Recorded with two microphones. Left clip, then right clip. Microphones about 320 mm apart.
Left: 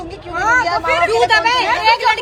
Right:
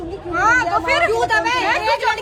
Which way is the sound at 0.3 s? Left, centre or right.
Centre.